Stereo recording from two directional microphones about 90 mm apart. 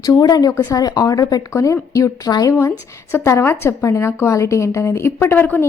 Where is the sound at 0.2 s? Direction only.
45° left (ahead or behind).